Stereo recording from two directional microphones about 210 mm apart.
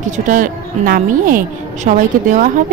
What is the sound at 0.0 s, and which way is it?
A woman's voice, 35° right (ahead or behind).